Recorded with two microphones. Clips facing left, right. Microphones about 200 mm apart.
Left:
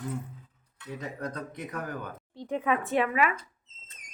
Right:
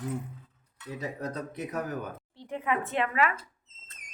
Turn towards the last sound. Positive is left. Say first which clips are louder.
# left 2 dB
turn(degrees=15)  # may be behind; listen again after turning